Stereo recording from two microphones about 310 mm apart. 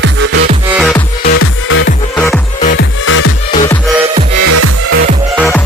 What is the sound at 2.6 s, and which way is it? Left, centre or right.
Music, left.